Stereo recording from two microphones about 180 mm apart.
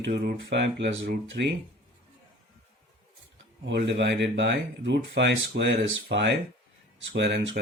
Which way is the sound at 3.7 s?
70° right (ahead or behind).